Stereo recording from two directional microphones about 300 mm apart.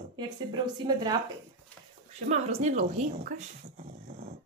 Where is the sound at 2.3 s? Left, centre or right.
Right.